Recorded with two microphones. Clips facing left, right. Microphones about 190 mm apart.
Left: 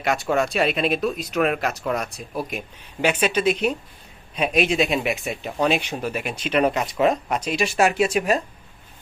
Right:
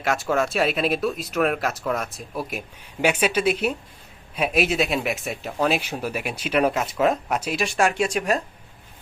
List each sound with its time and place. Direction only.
0.0 s speech: centre (ahead or behind)